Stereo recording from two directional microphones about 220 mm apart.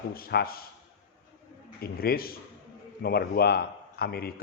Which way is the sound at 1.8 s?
45° left (ahead or behind).